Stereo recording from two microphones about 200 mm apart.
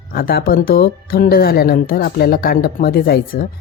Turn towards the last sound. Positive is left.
turn(degrees=50)  # may be behind; listen again after turning